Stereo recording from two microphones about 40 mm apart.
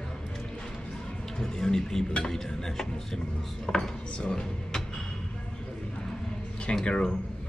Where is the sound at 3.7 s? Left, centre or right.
Centre.